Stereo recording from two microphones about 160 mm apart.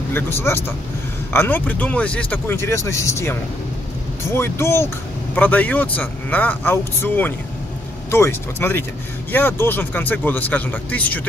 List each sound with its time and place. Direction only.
0.1 s speech: 15° left (ahead or behind)